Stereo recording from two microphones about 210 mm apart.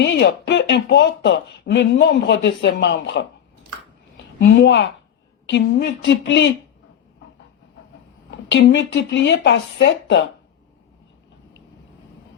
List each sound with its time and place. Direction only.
0.0 s speech: 55° left (ahead or behind)
4.4 s speech: 55° left (ahead or behind)
8.3 s speech: 55° left (ahead or behind)